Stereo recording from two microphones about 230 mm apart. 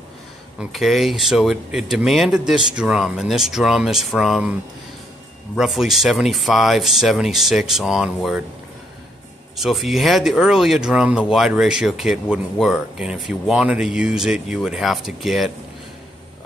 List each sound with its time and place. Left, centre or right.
0.6 s speech: centre
5.6 s speech: centre
9.6 s speech: centre